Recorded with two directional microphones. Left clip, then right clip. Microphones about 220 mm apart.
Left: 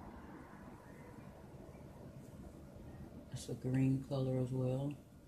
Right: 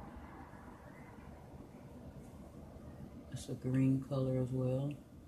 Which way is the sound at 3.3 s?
15° left (ahead or behind).